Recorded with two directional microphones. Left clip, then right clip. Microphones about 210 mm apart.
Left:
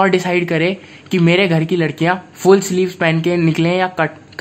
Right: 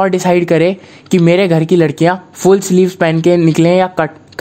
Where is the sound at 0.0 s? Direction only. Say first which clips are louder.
Right 3 dB; 35° right (ahead or behind).